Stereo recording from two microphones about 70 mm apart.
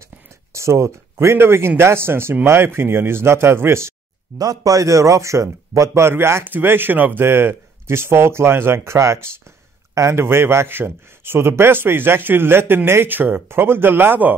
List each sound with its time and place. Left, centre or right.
0.5 s speech: right
4.4 s speech: right